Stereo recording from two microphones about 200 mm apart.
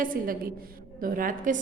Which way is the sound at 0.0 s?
45° right (ahead or behind).